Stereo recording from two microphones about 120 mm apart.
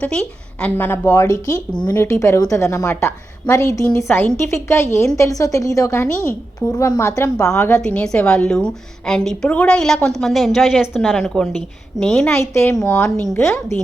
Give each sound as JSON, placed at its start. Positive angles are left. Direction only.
{"t": 0.0, "sound": "speech", "side_deg": 10}
{"t": 2.0, "sound": "speech", "side_deg": 25}
{"t": 7.9, "sound": "a woman's voice", "side_deg": 10}
{"t": 12.4, "sound": "speech", "side_deg": 25}